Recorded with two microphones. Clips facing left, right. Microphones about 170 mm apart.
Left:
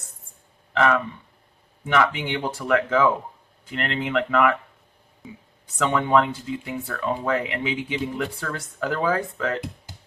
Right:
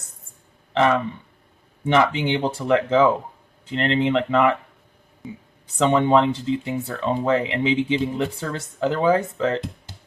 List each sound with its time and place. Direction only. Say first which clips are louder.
0.7 s speech: right 2 dB; 25° right (ahead or behind)
5.7 s speech: right 3 dB; 25° right (ahead or behind)